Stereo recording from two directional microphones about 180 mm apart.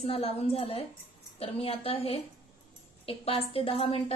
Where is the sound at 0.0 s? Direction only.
35° left (ahead or behind).